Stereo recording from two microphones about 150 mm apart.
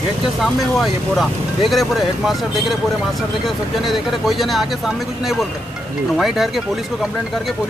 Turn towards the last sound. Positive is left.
turn(degrees=0)  # may be behind; listen again after turning